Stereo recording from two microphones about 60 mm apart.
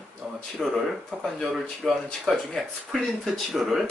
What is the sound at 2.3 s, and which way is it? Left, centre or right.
Speech, centre.